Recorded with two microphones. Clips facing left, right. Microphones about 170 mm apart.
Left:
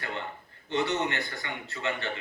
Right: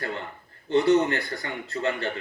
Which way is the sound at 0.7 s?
40° right (ahead or behind).